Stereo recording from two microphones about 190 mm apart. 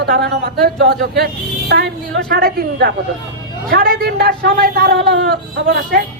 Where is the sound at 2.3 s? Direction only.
50° right (ahead or behind).